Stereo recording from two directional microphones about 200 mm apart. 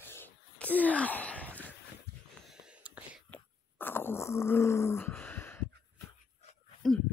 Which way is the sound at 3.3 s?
10° left (ahead or behind).